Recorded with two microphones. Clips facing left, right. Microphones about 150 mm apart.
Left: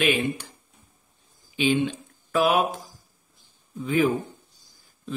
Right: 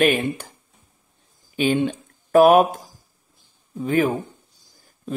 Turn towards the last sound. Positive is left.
turn(degrees=-50)  # may be behind; listen again after turning